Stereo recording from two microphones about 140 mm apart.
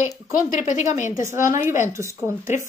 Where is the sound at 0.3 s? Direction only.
70° left (ahead or behind).